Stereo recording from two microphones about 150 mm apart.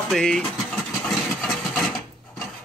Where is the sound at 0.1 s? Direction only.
5° left (ahead or behind).